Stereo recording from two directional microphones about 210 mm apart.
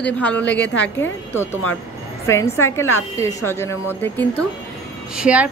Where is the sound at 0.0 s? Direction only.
5° left (ahead or behind).